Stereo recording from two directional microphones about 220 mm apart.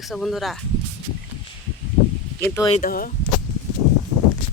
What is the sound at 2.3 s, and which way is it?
Speech, 10° left (ahead or behind).